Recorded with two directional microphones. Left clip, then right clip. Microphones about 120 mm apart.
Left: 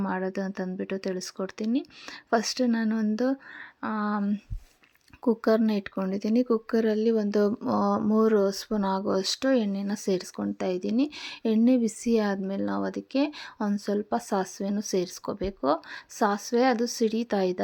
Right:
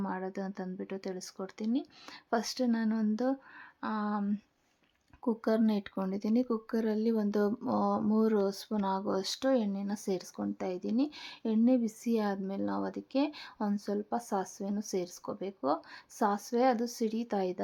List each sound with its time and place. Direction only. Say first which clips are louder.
0.0 s speech: left 7 dB; 25° left (ahead or behind)